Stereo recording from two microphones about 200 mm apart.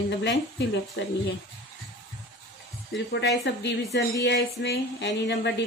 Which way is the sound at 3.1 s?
60° left (ahead or behind).